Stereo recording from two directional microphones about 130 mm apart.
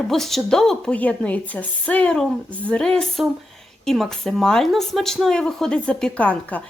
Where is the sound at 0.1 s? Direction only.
Centre (ahead or behind).